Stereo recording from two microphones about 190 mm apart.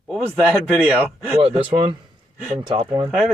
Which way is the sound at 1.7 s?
30° right (ahead or behind).